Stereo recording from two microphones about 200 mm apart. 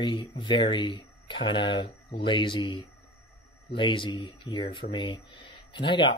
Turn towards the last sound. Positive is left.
turn(degrees=25)  # may be behind; listen again after turning